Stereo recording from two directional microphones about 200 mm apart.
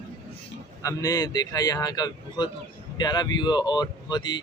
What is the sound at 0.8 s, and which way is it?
Speech, 20° left (ahead or behind).